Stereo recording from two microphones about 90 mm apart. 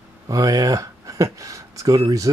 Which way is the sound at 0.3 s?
45° right (ahead or behind).